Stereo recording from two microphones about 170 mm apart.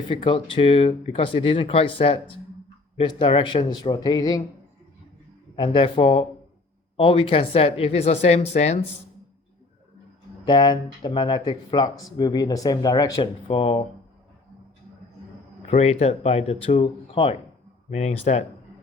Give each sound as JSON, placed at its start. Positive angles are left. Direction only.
{"t": 0.1, "sound": "speech", "side_deg": 30}
{"t": 5.5, "sound": "speech", "side_deg": 30}
{"t": 10.4, "sound": "speech", "side_deg": 25}
{"t": 13.5, "sound": "speech", "side_deg": 35}
{"t": 15.7, "sound": "speech", "side_deg": 40}